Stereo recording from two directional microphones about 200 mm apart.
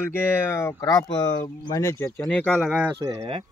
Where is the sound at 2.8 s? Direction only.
25° right (ahead or behind).